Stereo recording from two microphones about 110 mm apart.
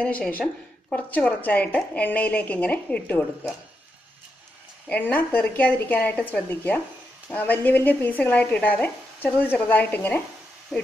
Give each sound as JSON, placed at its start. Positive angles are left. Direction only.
{"t": 0.0, "sound": "speech", "side_deg": 10}
{"t": 4.8, "sound": "speech", "side_deg": 15}